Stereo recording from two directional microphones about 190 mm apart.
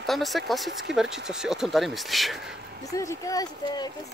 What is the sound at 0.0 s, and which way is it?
Speech, centre (ahead or behind).